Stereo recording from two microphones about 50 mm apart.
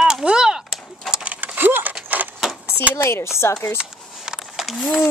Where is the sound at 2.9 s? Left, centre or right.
Left.